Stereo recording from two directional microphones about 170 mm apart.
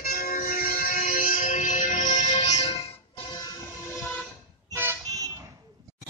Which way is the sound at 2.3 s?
40° left (ahead or behind).